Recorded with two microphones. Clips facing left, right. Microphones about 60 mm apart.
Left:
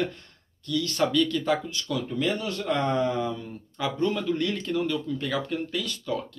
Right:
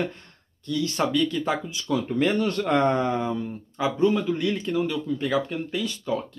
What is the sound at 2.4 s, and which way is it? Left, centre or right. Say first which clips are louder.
Speech: right 5 dB; right.